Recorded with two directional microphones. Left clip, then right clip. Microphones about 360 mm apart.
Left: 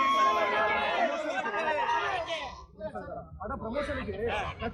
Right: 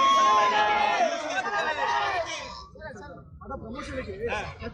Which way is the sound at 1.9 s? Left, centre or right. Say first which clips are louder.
Right 3 dB; centre.